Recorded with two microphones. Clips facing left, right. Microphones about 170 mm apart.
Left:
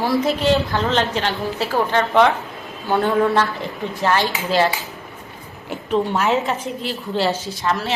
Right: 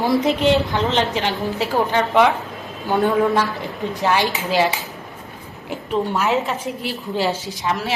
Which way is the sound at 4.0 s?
15° right (ahead or behind).